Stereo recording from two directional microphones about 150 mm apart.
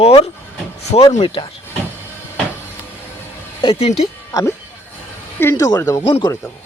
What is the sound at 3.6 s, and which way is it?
Speech, 40° left (ahead or behind).